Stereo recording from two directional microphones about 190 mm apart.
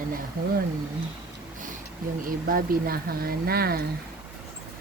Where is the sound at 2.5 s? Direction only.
50° right (ahead or behind).